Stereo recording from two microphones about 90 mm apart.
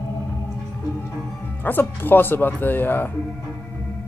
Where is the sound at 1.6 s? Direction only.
20° left (ahead or behind).